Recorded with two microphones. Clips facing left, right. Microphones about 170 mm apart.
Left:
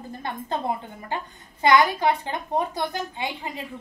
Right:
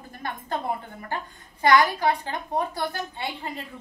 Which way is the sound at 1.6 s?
20° left (ahead or behind).